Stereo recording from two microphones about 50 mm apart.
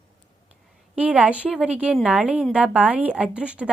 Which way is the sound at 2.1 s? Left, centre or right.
Right.